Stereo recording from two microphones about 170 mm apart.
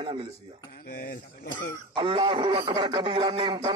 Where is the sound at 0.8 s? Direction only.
55° left (ahead or behind).